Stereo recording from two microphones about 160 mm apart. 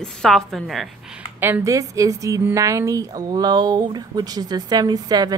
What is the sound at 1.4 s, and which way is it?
A woman's voice, 15° right (ahead or behind).